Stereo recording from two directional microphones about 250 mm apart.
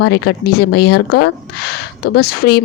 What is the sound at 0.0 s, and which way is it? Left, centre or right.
Speech, left.